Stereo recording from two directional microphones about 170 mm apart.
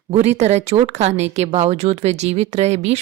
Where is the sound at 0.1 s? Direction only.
40° right (ahead or behind).